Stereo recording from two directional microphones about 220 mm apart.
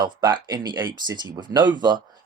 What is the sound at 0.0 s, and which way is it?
Speech, 20° right (ahead or behind).